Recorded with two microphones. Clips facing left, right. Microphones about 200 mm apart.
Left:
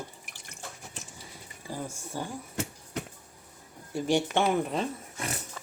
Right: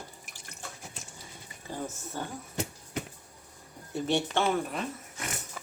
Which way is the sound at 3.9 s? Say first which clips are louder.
Left 2 dB; 15° left (ahead or behind).